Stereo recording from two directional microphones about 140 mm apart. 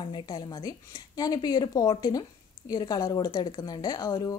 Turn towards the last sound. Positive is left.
turn(degrees=25)  # may be behind; listen again after turning